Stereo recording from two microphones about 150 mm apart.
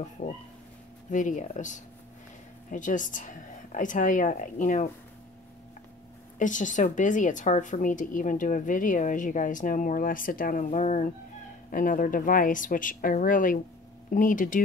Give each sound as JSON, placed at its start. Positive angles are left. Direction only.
{"t": 0.2, "sound": "speech", "side_deg": 40}
{"t": 1.1, "sound": "a woman's voice", "side_deg": 55}
{"t": 6.3, "sound": "a woman's voice", "side_deg": 60}